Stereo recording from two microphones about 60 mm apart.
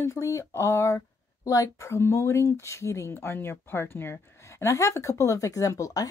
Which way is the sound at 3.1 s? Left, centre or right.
Left.